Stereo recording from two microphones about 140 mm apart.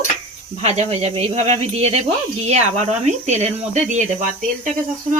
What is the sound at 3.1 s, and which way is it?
Speech, 55° right (ahead or behind).